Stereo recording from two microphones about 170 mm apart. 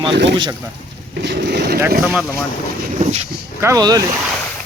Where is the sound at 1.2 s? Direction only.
80° right.